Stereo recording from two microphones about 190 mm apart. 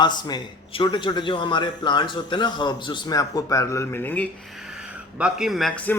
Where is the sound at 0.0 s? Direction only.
25° left (ahead or behind).